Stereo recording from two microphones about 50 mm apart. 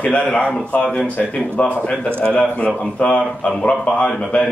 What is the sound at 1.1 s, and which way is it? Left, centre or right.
A man's voice, left.